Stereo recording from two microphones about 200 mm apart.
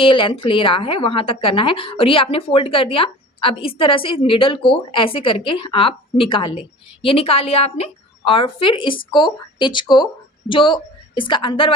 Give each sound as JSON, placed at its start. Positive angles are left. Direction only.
{"t": 0.0, "sound": "a woman's voice", "side_deg": 25}